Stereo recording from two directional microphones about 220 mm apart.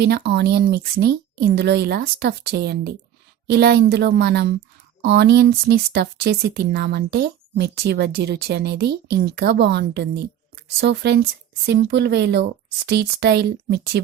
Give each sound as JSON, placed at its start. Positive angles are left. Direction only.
{"t": 0.0, "sound": "speech", "side_deg": -50}